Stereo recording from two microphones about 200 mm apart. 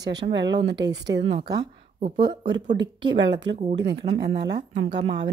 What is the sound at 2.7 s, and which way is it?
A woman's voice, 65° right (ahead or behind).